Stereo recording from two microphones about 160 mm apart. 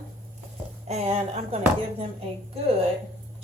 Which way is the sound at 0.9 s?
45° right (ahead or behind).